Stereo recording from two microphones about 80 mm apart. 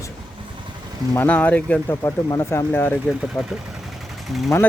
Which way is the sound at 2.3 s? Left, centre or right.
Left.